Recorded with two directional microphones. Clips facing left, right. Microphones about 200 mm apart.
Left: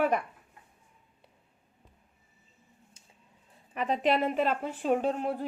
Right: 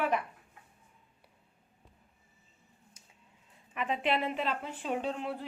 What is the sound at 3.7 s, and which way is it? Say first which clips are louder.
A woman's voice: left 4 dB; 40° left (ahead or behind).